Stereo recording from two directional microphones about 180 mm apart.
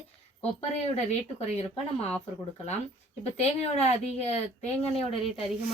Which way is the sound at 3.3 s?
35° left (ahead or behind).